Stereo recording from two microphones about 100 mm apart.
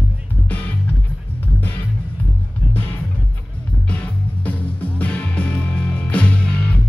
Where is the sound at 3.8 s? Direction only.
15° left (ahead or behind).